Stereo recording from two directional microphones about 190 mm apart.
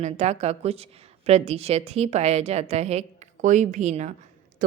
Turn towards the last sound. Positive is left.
turn(degrees=-40)  # may be behind; listen again after turning